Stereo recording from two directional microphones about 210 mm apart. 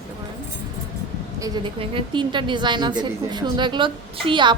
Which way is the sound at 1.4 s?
25° right (ahead or behind).